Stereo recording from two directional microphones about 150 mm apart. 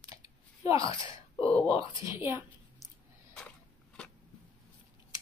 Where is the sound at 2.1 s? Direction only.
15° right (ahead or behind).